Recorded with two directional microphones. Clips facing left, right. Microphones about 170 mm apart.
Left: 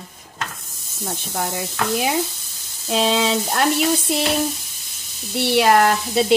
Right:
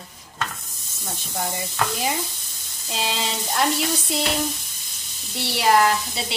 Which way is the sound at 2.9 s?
70° left (ahead or behind).